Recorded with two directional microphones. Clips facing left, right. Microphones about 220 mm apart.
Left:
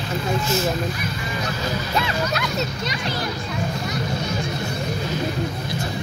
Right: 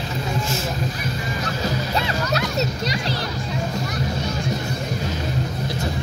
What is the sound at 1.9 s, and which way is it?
Music, 35° right (ahead or behind).